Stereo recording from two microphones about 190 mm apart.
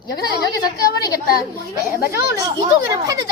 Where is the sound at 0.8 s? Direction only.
20° left (ahead or behind).